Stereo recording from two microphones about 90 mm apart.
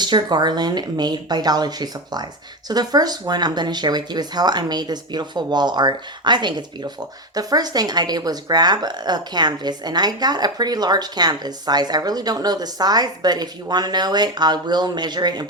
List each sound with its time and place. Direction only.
0.0 s a woman's voice: 55° right (ahead or behind)